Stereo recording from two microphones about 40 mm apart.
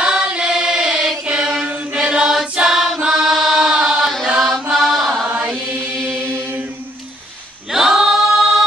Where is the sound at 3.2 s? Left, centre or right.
Centre.